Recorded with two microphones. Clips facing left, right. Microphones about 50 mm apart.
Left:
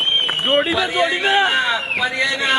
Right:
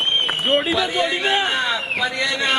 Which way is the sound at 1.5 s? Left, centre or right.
Centre.